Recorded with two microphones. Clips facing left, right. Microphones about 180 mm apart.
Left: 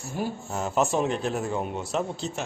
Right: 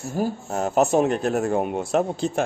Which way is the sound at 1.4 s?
55° right (ahead or behind).